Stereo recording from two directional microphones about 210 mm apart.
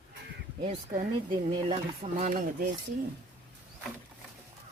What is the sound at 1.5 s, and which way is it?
Speech, 25° right (ahead or behind).